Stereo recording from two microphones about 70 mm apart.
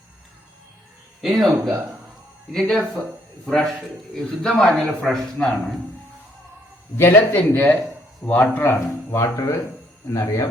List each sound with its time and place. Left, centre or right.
1.2 s a man's voice: centre
6.9 s speech: left
8.2 s a man's voice: centre
8.7 s speech: left
9.1 s speech: left